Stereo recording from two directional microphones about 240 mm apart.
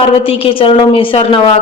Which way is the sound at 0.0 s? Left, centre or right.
Left.